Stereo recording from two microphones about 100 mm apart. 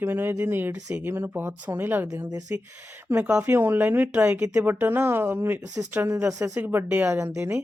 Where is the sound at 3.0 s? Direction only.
15° right (ahead or behind).